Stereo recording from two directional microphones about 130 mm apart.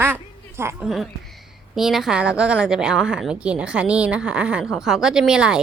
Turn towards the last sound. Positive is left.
turn(degrees=-5)  # may be behind; listen again after turning